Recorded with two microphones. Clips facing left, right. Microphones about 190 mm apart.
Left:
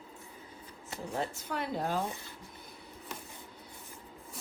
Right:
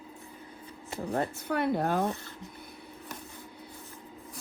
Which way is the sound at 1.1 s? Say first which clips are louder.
Right 6 dB; 60° right (ahead or behind).